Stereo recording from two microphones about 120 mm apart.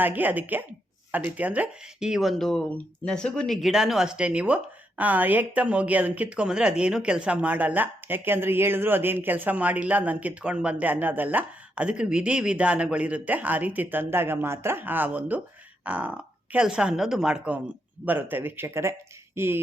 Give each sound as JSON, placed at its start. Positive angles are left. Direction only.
{"t": 0.0, "sound": "speech", "side_deg": -15}